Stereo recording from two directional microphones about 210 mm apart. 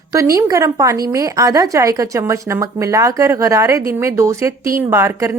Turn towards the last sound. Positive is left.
turn(degrees=-15)  # may be behind; listen again after turning